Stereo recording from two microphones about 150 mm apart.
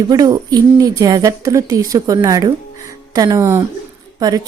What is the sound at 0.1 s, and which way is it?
A woman's voice, 25° right (ahead or behind).